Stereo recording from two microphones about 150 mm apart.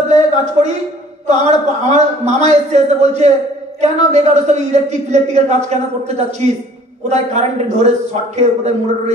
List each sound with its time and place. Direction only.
0.3 s a man's voice: 50° right (ahead or behind)